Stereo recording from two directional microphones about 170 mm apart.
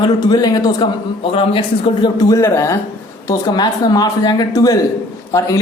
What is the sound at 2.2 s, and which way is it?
A man's voice, 20° left (ahead or behind).